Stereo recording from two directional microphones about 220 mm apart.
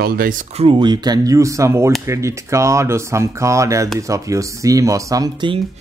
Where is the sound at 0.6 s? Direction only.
20° right (ahead or behind).